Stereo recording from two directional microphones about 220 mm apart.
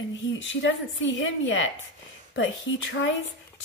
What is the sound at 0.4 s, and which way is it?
Speech, 60° left (ahead or behind).